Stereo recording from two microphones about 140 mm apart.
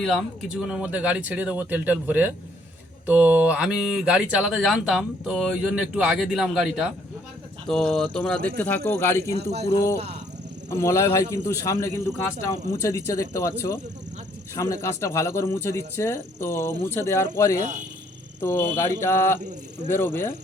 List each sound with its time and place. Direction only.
0.0 s speech: centre (ahead or behind)
7.9 s speech: 5° left (ahead or behind)
9.3 s speech: 50° right (ahead or behind)
10.7 s speech: 20° left (ahead or behind)
19.4 s speech: 55° right (ahead or behind)
19.9 s speech: 15° left (ahead or behind)